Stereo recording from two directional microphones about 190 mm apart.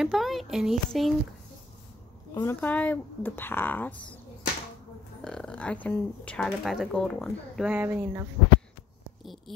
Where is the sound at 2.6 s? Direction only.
5° left (ahead or behind).